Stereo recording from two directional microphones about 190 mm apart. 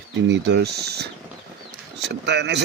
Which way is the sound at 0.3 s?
70° right (ahead or behind).